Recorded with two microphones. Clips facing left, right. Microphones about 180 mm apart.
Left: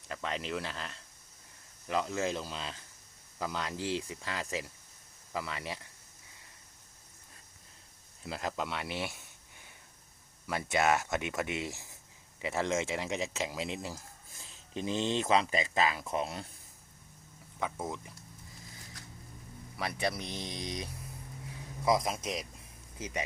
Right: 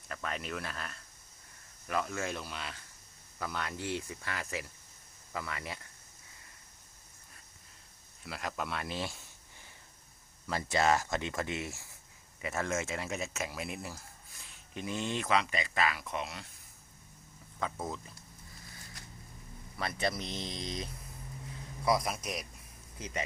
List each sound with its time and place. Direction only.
0.1 s speech: 25° left (ahead or behind)
3.8 s speech: 90° left
4.1 s speech: 20° left (ahead or behind)
8.2 s speech: 25° left (ahead or behind)
8.6 s speech: 15° left (ahead or behind)
10.4 s speech: 10° left (ahead or behind)
14.7 s speech: 30° left (ahead or behind)
17.6 s speech: 10° left (ahead or behind)
19.7 s speech: 10° left (ahead or behind)